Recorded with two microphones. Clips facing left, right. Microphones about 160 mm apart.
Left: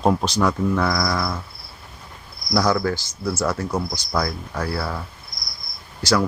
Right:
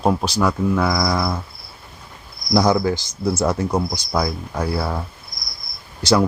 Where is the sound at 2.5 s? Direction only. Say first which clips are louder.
Right 3 dB; 20° right (ahead or behind).